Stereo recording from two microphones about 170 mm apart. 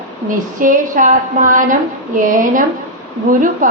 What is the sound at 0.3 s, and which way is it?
A woman's voice, 50° right (ahead or behind).